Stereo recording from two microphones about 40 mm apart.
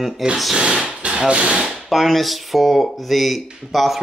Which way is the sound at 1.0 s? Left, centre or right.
Right.